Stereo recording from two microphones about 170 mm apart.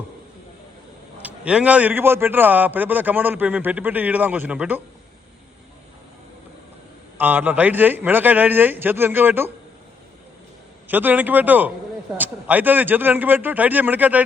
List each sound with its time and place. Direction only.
1.2 s a man's voice: 5° right (ahead or behind)
7.2 s a man's voice: 10° right (ahead or behind)
10.8 s a man's voice: 10° right (ahead or behind)